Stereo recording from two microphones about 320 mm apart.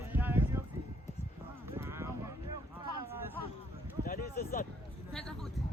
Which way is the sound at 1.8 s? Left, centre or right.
Centre.